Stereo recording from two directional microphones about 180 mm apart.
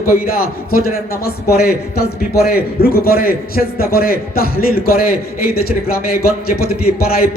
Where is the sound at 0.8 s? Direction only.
60° left (ahead or behind).